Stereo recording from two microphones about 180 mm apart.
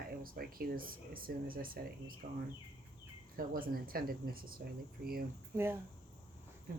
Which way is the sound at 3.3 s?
55° right (ahead or behind).